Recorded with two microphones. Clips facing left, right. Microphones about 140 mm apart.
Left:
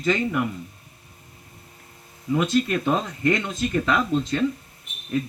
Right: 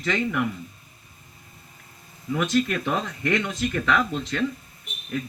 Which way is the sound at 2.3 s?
25° left (ahead or behind).